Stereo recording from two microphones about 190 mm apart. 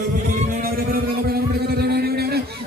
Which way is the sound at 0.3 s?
45° right (ahead or behind).